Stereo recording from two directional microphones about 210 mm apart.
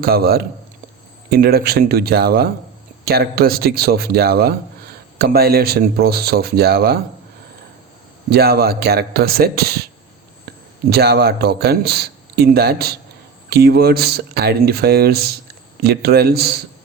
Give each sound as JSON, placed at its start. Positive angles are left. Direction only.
{"t": 0.0, "sound": "a man's voice", "side_deg": -45}
{"t": 8.3, "sound": "a man's voice", "side_deg": -50}